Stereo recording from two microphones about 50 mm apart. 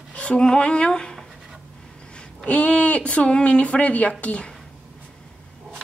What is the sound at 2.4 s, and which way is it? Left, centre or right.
Speech, left.